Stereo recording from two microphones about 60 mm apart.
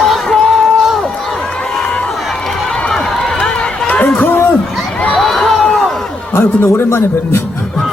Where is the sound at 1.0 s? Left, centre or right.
Centre.